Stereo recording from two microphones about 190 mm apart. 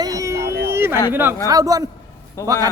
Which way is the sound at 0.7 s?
15° right (ahead or behind).